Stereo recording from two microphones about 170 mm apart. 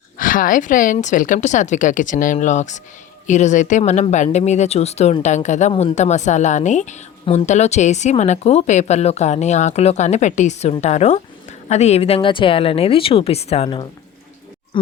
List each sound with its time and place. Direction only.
0.2 s speech: 55° left (ahead or behind); by 13.8 s 35° left (ahead or behind)